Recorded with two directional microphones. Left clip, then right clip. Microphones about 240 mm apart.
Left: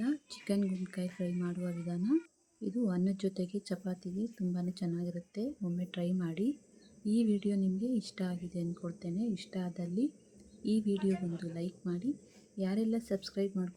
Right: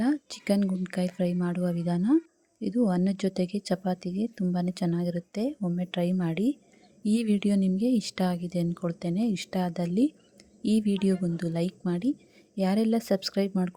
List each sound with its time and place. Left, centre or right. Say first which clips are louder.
0.0 s speech: right 8 dB; right